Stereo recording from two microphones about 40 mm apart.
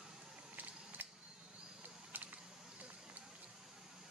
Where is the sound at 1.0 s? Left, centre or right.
Right.